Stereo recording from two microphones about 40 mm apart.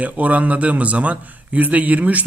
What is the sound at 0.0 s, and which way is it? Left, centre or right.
A man's voice, right.